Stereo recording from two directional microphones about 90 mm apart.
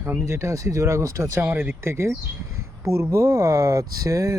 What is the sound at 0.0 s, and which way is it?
Speech, 30° right (ahead or behind).